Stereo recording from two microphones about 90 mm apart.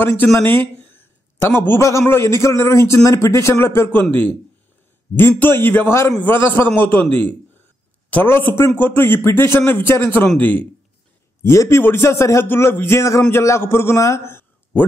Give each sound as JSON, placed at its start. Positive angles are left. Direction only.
{"t": 0.0, "sound": "a man's voice", "side_deg": 25}
{"t": 5.5, "sound": "a man's voice", "side_deg": 25}
{"t": 11.4, "sound": "a man's voice", "side_deg": 30}